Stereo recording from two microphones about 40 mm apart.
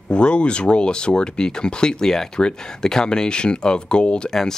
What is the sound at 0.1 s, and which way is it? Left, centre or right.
Speech, left.